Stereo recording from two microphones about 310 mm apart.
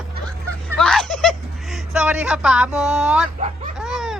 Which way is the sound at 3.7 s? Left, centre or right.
Centre.